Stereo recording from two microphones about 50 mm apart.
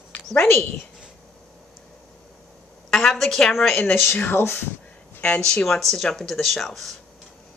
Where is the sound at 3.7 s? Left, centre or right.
Left.